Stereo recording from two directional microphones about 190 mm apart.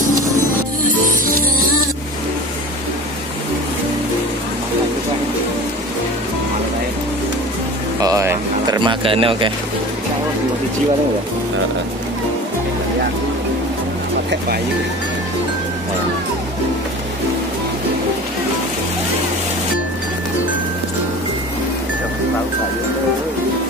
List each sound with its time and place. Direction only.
0.9 s music: 45° right (ahead or behind)
8.0 s bird: 15° right (ahead or behind)